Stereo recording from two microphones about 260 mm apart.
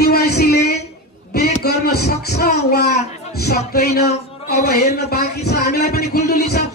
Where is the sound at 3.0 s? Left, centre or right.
Left.